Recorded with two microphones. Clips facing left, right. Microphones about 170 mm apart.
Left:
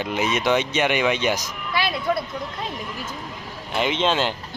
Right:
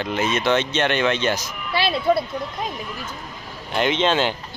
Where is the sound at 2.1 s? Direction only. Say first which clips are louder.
Right 6 dB; 25° right (ahead or behind).